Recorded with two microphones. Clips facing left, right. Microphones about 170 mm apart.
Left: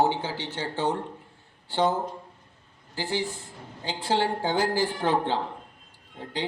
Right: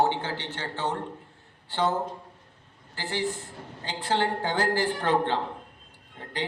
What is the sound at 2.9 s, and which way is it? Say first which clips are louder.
A man's voice: left 1 dB; 10° left (ahead or behind).